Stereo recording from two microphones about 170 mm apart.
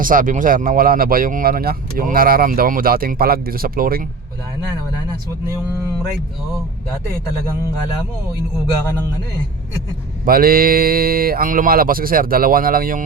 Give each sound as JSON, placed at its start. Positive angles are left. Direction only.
{"t": 0.0, "sound": "speech", "side_deg": -55}
{"t": 10.2, "sound": "speech", "side_deg": -60}